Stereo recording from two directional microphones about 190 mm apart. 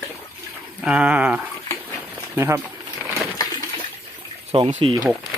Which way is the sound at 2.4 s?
15° right (ahead or behind).